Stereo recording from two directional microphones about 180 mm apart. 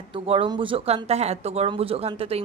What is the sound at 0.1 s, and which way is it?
Speech, 30° right (ahead or behind).